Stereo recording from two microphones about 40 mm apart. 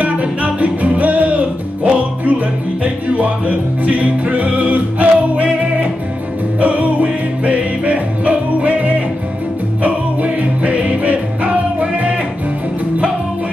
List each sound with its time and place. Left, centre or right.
0.0 s music: right